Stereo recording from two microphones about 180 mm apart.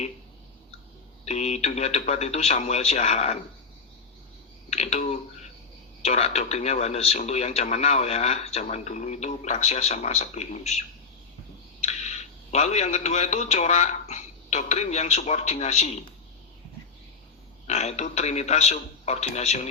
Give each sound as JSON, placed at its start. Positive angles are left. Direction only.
{"t": 1.2, "sound": "speech", "side_deg": 40}
{"t": 4.7, "sound": "a man's voice", "side_deg": 35}
{"t": 17.7, "sound": "speech", "side_deg": 35}